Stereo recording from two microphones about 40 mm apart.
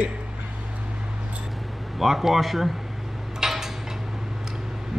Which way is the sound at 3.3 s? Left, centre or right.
Centre.